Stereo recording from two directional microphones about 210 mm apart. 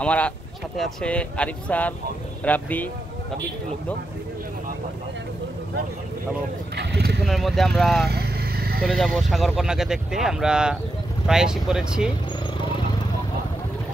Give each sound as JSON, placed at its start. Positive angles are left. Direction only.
{"t": 0.0, "sound": "speech", "side_deg": 5}
{"t": 6.8, "sound": "speech", "side_deg": -55}
{"t": 7.2, "sound": "speech", "side_deg": 0}
{"t": 8.1, "sound": "vehicle", "side_deg": -50}
{"t": 8.8, "sound": "speech", "side_deg": 0}